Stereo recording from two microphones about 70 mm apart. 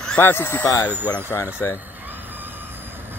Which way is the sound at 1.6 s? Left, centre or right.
Left.